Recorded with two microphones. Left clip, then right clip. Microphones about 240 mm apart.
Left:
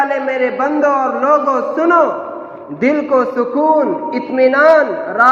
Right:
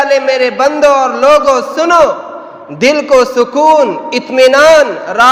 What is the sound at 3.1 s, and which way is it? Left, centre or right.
A man's voice, right.